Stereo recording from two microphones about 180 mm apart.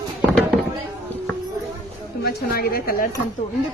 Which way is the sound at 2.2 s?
55° left (ahead or behind).